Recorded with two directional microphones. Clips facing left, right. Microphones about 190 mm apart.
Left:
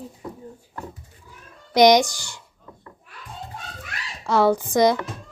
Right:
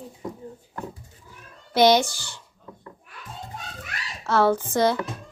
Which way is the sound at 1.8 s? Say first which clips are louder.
Left 3 dB; 15° left (ahead or behind).